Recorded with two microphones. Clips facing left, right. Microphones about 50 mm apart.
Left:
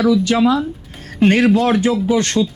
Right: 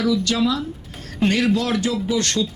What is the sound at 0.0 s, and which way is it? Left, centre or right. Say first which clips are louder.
Speech: left 6 dB; left.